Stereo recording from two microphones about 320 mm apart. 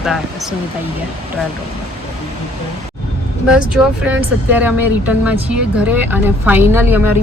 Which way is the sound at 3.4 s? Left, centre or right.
Centre.